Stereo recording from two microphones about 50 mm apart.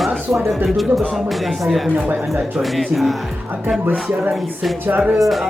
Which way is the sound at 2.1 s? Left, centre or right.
Centre.